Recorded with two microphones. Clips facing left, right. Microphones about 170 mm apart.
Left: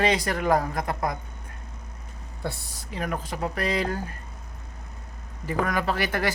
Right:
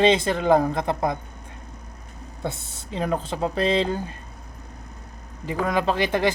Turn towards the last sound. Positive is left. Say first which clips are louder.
# right 4 dB
turn(degrees=-20)  # may be behind; listen again after turning